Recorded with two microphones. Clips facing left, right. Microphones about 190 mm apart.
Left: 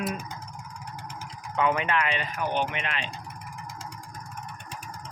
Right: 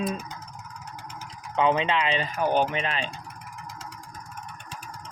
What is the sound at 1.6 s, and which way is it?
Speech, 25° right (ahead or behind).